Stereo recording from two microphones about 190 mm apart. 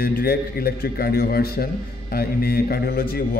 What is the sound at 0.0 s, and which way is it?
A man's voice, 50° left (ahead or behind).